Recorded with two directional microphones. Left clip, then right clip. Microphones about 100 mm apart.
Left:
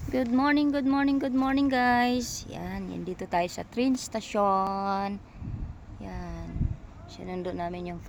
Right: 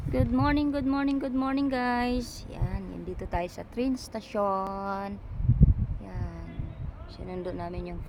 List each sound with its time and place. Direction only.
0.1 s speech: 20° left (ahead or behind)
2.9 s speech: 85° left; by 5.1 s 60° left (ahead or behind)
7.3 s speech: 40° left (ahead or behind)